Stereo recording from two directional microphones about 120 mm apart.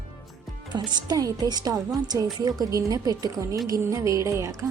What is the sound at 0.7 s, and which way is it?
A woman's voice, 35° right (ahead or behind).